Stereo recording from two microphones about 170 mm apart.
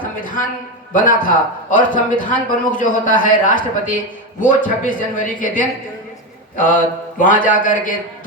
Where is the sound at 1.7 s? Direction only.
50° left (ahead or behind).